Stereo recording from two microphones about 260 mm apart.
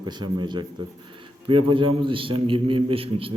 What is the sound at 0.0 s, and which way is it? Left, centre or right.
A man's voice, centre.